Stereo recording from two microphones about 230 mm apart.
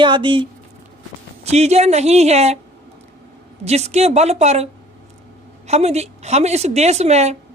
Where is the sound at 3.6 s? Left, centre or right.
Right.